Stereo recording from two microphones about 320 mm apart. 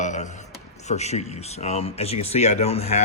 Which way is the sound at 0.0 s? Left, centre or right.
Left.